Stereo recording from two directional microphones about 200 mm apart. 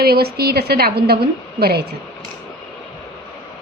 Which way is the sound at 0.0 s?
50° right (ahead or behind).